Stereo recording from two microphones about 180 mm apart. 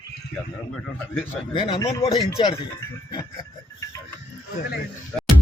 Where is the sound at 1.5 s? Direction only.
30° left (ahead or behind).